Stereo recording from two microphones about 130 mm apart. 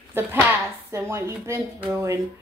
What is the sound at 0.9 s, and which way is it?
Speech, 20° right (ahead or behind).